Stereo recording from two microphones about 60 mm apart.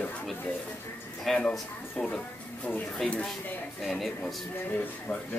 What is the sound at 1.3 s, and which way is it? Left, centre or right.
Speech, centre.